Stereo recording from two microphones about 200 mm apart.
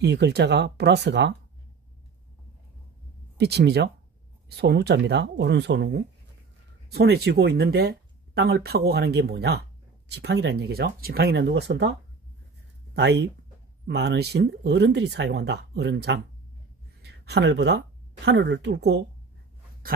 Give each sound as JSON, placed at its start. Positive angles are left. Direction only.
{"t": 0.0, "sound": "speech", "side_deg": -60}
{"t": 3.3, "sound": "speech", "side_deg": -55}
{"t": 12.9, "sound": "speech", "side_deg": -55}